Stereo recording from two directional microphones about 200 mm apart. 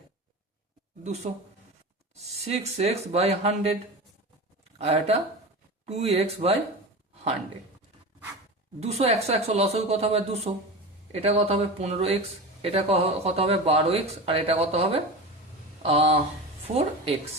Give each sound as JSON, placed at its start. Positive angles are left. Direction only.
{"t": 1.0, "sound": "speech", "side_deg": -35}
{"t": 4.8, "sound": "speech", "side_deg": -30}
{"t": 8.8, "sound": "speech", "side_deg": -30}